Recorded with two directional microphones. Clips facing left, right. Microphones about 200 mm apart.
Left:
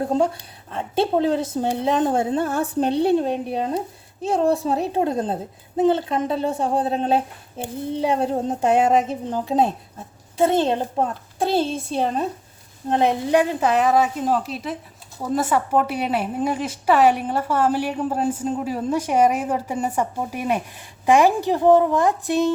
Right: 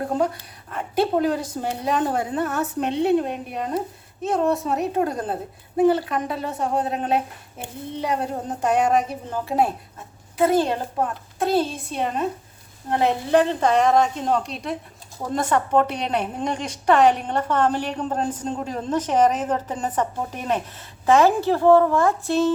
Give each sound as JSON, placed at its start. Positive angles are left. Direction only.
{"t": 0.7, "sound": "a woman's voice", "side_deg": 25}
{"t": 12.9, "sound": "a woman's voice", "side_deg": 20}